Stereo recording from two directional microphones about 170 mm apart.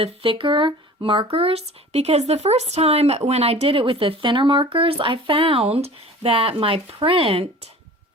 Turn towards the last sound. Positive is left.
turn(degrees=-35)  # may be behind; listen again after turning